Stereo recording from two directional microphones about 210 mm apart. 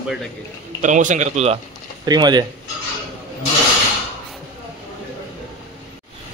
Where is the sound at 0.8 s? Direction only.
35° right (ahead or behind).